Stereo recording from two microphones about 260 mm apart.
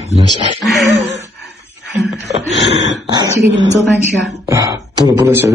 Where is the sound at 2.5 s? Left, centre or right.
Left.